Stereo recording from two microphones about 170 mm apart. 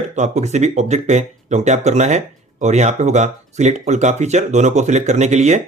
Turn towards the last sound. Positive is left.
turn(degrees=-45)  # may be behind; listen again after turning